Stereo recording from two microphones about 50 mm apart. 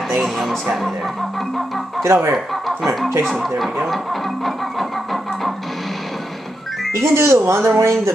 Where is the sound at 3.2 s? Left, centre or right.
Centre.